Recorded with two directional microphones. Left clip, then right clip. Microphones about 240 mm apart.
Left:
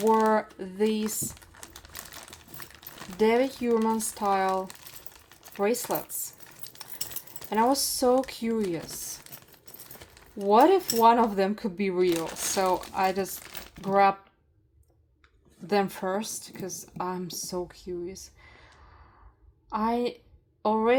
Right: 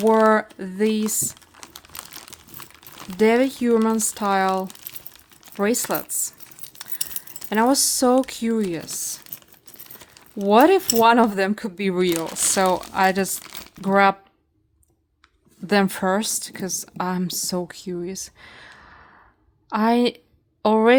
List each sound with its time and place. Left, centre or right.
0.0 s speech: right
3.2 s speech: right
7.3 s speech: right
10.3 s speech: right
15.6 s a woman's voice: right